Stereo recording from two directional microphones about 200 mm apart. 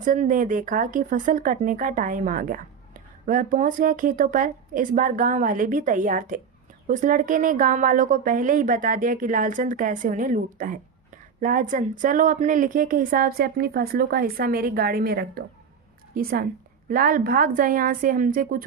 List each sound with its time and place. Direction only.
0.0 s a woman's voice: 40° right (ahead or behind)